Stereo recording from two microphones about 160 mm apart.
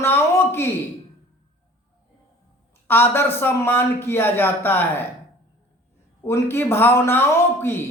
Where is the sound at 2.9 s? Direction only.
15° left (ahead or behind).